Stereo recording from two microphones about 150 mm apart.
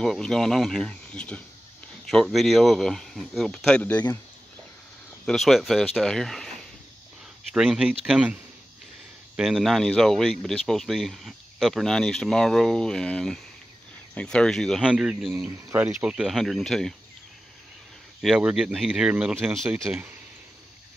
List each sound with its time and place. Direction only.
0.0 s speech: 5° left (ahead or behind)
5.2 s speech: centre (ahead or behind)
7.5 s speech: 5° right (ahead or behind)
9.4 s speech: centre (ahead or behind)
15.3 s speech: 20° right (ahead or behind); by 16.9 s centre (ahead or behind)
18.2 s speech: 5° right (ahead or behind)